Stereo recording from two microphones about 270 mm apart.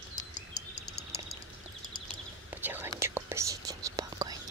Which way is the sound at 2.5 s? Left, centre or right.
Centre.